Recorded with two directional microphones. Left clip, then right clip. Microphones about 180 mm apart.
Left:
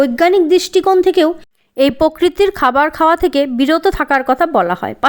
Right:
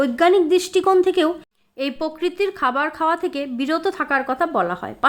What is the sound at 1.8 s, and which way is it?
Speech, 40° left (ahead or behind).